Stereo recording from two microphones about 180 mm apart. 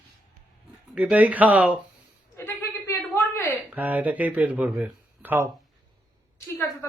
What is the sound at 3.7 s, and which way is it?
Speech, 10° right (ahead or behind).